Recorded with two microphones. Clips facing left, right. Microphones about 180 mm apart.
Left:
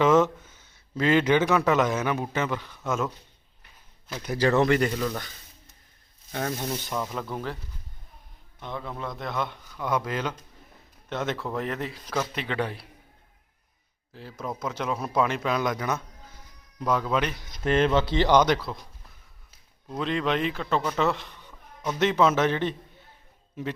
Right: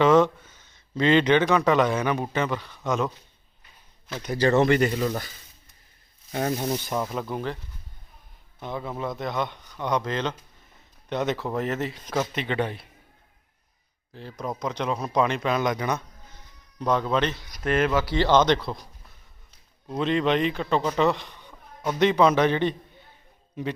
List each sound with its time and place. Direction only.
0.0 s a man's voice: 10° left (ahead or behind)
4.1 s a man's voice: 5° left (ahead or behind)
4.9 s speech: 15° right (ahead or behind)
6.3 s rub: 20° right (ahead or behind)
7.0 s speech: 5° right (ahead or behind)
8.6 s a man's voice: 5° right (ahead or behind)
14.1 s a man's voice: 5° left (ahead or behind)
17.7 s speech: 25° left (ahead or behind); by 18.6 s 10° left (ahead or behind)
20.0 s a man's voice: centre (ahead or behind)